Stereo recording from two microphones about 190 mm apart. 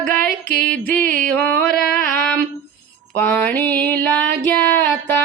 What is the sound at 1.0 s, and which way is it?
Music, 45° right (ahead or behind).